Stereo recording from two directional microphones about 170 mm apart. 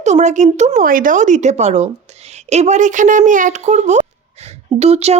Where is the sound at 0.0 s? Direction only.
45° right (ahead or behind).